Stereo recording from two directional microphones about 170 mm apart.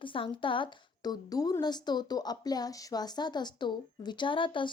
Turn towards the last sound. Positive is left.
turn(degrees=30)  # may be behind; listen again after turning